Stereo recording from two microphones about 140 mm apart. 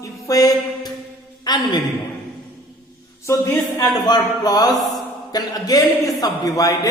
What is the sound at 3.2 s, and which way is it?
A man's voice, 20° left (ahead or behind).